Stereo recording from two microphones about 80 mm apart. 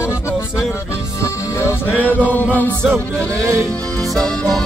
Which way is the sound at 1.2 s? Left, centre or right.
Left.